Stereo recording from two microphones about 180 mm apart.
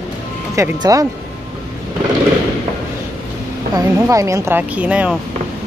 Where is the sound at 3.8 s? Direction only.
20° right (ahead or behind).